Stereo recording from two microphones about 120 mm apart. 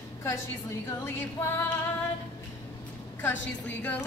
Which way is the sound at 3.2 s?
15° left (ahead or behind).